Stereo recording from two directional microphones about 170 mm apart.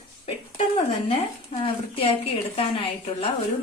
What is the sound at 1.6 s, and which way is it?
Speech, 35° left (ahead or behind).